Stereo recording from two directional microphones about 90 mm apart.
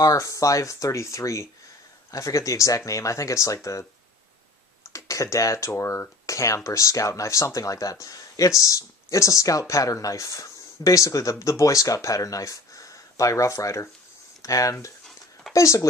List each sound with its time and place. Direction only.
0.0 s speech: 40° left (ahead or behind)
4.9 s speech: 35° left (ahead or behind)